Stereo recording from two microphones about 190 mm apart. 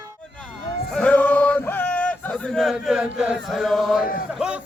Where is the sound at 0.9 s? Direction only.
5° left (ahead or behind).